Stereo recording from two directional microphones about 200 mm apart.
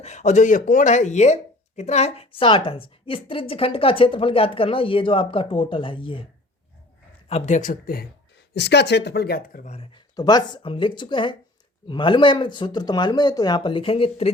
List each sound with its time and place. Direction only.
0.0 s speech: 35° left (ahead or behind)
7.3 s speech: 35° left (ahead or behind)
8.5 s speech: 55° left (ahead or behind); by 14.3 s 30° left (ahead or behind)